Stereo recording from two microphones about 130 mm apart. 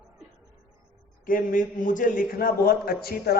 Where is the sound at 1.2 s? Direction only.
90° left.